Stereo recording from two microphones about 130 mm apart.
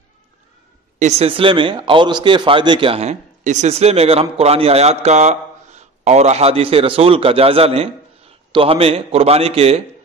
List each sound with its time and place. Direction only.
0.9 s a man's voice: 60° right (ahead or behind)